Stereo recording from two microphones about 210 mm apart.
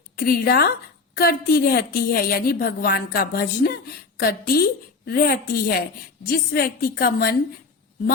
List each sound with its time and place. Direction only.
0.2 s a woman's voice: 45° left (ahead or behind)